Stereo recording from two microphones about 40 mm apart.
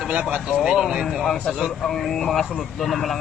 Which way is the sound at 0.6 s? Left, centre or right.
Centre.